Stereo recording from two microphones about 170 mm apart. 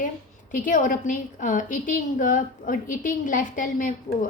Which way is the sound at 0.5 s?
50° left (ahead or behind).